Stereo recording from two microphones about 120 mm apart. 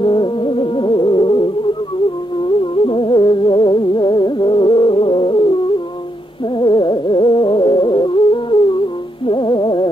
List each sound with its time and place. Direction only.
0.0 s music: 45° left (ahead or behind)
2.8 s music: 45° left (ahead or behind)
6.6 s music: 40° left (ahead or behind)